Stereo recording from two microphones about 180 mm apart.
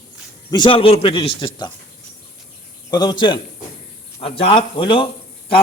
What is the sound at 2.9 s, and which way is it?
A man's voice, 25° left (ahead or behind).